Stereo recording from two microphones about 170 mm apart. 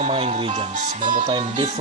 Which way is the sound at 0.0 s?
35° right (ahead or behind).